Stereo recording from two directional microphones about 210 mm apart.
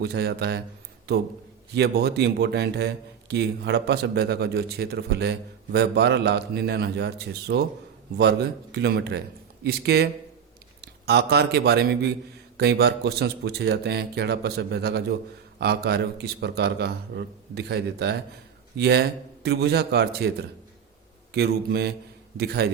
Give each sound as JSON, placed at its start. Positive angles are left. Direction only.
{"t": 0.0, "sound": "a man's voice", "side_deg": -50}
{"t": 1.7, "sound": "a man's voice", "side_deg": -50}
{"t": 21.3, "sound": "a man's voice", "side_deg": -50}